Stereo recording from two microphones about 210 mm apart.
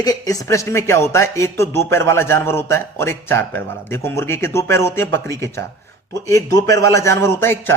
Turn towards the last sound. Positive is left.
turn(degrees=10)  # may be behind; listen again after turning